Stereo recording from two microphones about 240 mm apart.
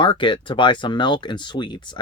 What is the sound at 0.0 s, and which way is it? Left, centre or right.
Speech, centre.